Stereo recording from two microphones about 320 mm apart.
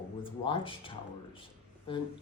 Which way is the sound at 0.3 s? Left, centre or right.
Centre.